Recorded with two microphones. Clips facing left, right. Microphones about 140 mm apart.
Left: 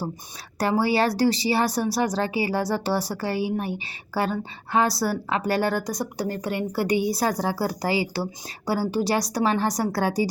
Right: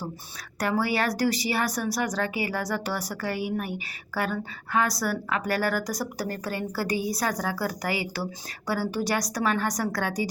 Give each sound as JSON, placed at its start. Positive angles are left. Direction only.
{"t": 0.6, "sound": "speech", "side_deg": 30}